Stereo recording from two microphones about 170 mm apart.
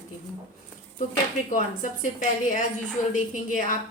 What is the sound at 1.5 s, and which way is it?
A woman's voice, 50° left (ahead or behind).